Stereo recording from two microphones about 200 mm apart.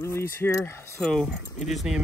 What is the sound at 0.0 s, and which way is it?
Speech, 15° left (ahead or behind).